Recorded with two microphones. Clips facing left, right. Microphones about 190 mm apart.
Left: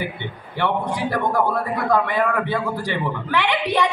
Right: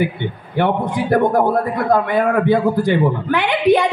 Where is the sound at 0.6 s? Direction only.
50° right (ahead or behind).